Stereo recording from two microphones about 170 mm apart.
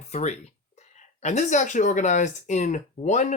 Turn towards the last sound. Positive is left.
turn(degrees=45)  # may be behind; listen again after turning